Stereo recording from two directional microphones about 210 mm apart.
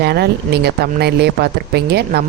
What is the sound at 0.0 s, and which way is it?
A woman's voice, 50° right (ahead or behind).